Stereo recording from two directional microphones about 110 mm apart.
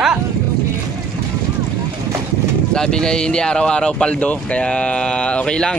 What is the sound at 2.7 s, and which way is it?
Speech, 5° left (ahead or behind).